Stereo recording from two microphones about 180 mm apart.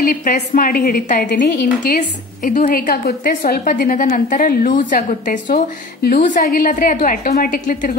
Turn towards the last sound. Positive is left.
turn(degrees=45)  # may be behind; listen again after turning